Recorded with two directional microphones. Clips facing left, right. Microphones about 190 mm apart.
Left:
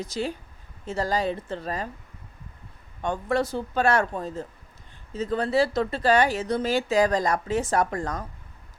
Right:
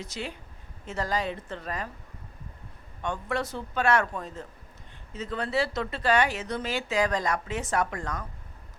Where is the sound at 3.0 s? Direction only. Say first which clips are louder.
Left 5 dB; 35° left (ahead or behind).